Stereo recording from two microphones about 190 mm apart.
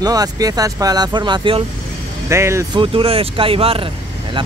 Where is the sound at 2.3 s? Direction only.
15° right (ahead or behind).